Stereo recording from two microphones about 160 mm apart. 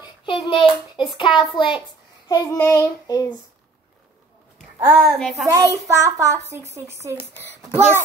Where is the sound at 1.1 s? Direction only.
30° left (ahead or behind).